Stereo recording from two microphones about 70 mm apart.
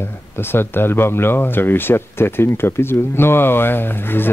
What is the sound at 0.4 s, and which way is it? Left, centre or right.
Speech, left.